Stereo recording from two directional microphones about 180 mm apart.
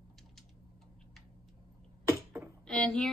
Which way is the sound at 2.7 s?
5° left (ahead or behind).